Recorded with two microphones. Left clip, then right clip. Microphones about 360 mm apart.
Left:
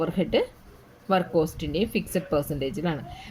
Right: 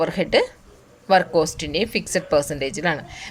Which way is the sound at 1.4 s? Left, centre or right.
Centre.